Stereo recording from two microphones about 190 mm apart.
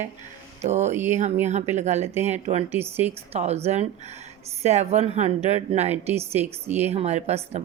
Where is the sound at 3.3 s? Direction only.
35° right (ahead or behind).